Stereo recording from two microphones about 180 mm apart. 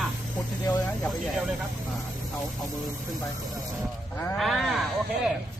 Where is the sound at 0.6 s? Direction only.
20° left (ahead or behind).